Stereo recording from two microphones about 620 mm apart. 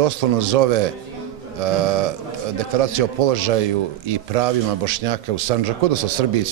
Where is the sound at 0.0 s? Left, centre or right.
Right.